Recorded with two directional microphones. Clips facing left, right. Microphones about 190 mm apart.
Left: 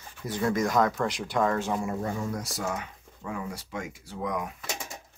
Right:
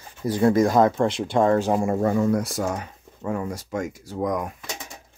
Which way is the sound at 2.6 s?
40° right (ahead or behind).